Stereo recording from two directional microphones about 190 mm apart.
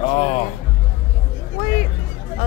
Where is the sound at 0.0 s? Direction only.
35° left (ahead or behind).